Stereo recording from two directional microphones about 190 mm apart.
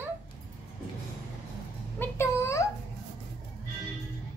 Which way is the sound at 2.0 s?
15° left (ahead or behind).